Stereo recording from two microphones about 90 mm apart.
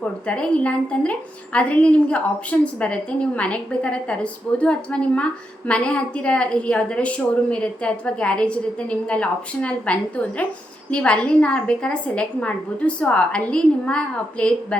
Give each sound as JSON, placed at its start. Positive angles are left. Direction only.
{"t": 0.3, "sound": "a woman's voice", "side_deg": 10}